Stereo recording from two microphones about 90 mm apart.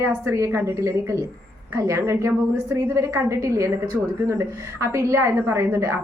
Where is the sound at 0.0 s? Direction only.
35° right (ahead or behind).